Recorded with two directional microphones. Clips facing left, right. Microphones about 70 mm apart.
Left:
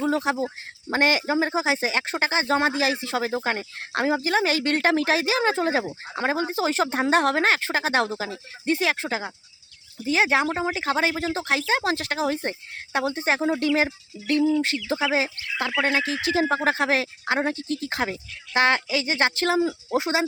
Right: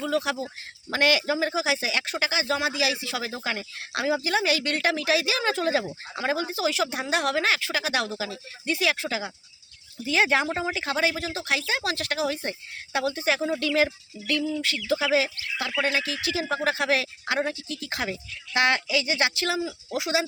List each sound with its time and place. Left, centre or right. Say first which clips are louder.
0.0 s speech: left 3 dB; left